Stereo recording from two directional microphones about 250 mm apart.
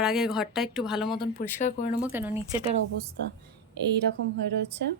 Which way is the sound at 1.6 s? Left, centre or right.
Left.